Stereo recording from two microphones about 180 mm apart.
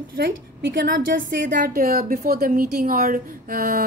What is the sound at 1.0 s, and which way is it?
A woman's voice, 50° right (ahead or behind).